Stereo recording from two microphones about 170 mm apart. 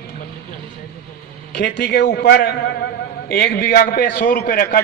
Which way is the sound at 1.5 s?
90° left.